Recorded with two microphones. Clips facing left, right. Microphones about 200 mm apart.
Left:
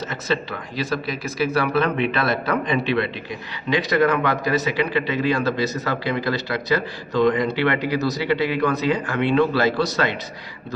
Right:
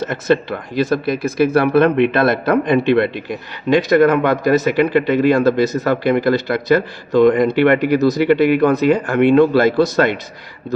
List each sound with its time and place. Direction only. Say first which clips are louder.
0.3 s a man's voice: right 9 dB; 55° right (ahead or behind)